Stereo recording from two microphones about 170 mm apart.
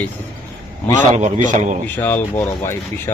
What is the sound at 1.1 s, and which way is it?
Speech, 45° right (ahead or behind).